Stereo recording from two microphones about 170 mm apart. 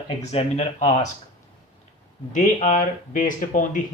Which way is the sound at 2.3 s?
50° left (ahead or behind).